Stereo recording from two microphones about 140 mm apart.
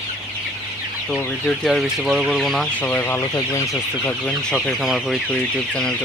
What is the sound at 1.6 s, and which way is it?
Speech, 5° right (ahead or behind).